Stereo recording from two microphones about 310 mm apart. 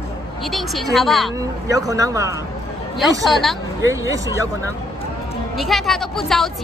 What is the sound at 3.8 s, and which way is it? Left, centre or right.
Speech, centre.